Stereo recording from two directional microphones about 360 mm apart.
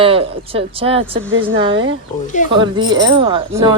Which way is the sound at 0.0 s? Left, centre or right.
Centre.